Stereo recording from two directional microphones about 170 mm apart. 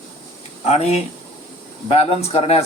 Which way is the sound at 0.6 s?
40° left (ahead or behind).